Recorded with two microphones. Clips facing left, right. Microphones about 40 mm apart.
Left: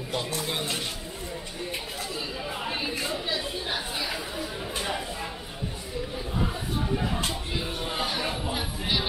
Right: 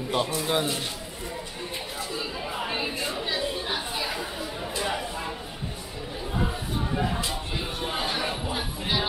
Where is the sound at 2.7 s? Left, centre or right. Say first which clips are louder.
Left 2 dB; centre.